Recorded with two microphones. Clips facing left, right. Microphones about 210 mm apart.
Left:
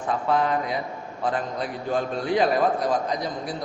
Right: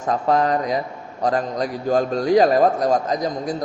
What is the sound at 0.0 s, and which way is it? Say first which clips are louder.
A man's voice: right 4 dB; 40° right (ahead or behind).